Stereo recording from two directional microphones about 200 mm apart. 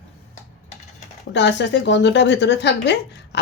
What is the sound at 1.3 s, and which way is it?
Speech, 60° left (ahead or behind).